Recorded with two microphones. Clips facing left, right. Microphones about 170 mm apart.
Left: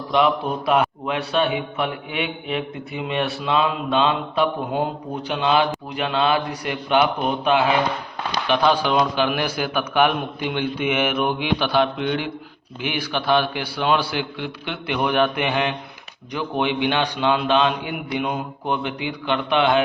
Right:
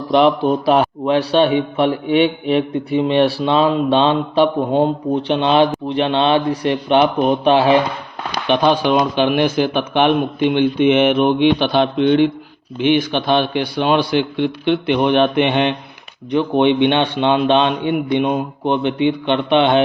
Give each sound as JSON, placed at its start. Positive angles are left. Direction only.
{"t": 0.1, "sound": "a man's voice", "side_deg": -30}
{"t": 8.4, "sound": "a man's voice", "side_deg": -20}